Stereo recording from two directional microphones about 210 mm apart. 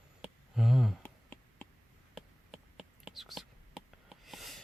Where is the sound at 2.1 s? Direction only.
Centre (ahead or behind).